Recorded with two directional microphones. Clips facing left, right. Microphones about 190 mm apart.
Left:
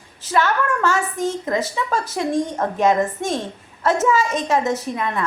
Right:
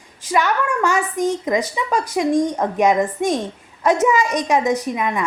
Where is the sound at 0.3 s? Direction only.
15° right (ahead or behind).